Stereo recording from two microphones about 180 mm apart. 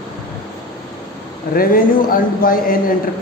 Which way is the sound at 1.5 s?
50° left (ahead or behind).